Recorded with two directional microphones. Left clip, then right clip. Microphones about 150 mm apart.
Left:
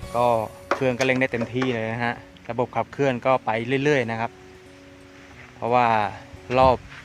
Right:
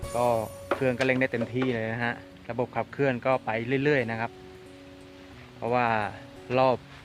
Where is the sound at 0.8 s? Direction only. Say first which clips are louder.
Left 3 dB; 30° left (ahead or behind).